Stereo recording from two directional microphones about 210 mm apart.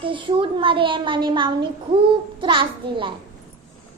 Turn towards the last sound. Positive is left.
turn(degrees=-25)  # may be behind; listen again after turning